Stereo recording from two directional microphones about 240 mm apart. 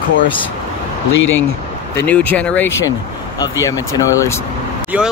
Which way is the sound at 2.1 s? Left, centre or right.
Centre.